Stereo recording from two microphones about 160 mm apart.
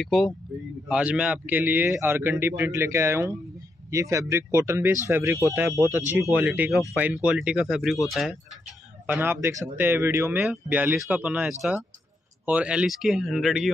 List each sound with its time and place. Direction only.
0.0 s a man's voice: centre (ahead or behind)
9.0 s a man's voice: 10° right (ahead or behind)